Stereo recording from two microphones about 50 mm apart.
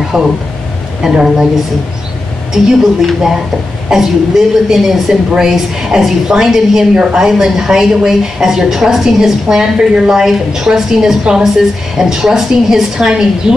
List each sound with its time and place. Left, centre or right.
0.1 s a woman's voice: centre
2.5 s a woman's voice: centre